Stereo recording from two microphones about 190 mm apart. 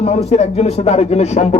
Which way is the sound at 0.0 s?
35° left (ahead or behind).